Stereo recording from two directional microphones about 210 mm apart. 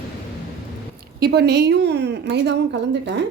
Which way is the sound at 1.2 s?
50° right (ahead or behind).